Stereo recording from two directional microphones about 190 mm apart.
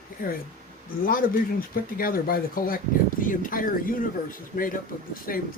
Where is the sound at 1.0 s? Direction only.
50° left (ahead or behind).